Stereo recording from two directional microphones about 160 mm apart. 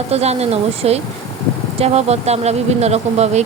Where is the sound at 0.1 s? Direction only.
40° right (ahead or behind).